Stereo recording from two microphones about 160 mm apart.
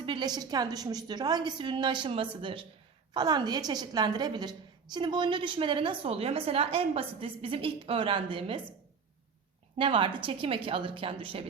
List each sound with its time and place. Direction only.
0.0 s a woman's voice: 30° right (ahead or behind)
9.7 s a woman's voice: 30° right (ahead or behind)